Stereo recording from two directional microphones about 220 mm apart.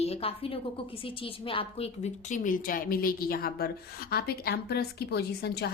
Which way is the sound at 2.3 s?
35° left (ahead or behind).